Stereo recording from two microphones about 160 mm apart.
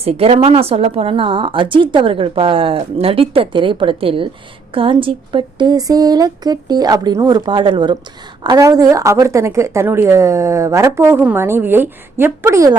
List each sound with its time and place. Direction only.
0.0 s a woman's voice: 40° right (ahead or behind); by 12.7 s 20° right (ahead or behind)